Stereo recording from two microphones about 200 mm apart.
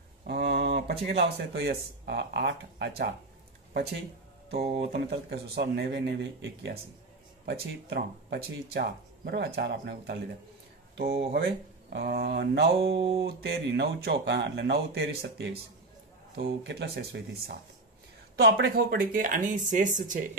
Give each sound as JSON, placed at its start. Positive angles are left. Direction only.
{"t": 0.3, "sound": "speech", "side_deg": -55}
{"t": 4.5, "sound": "speech", "side_deg": -55}
{"t": 12.9, "sound": "mantra", "side_deg": -30}
{"t": 13.2, "sound": "speech", "side_deg": -55}